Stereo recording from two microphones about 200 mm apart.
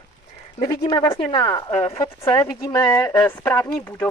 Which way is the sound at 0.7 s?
20° left (ahead or behind).